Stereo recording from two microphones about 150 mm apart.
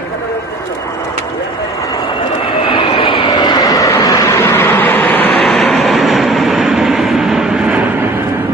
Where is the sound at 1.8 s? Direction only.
25° left (ahead or behind).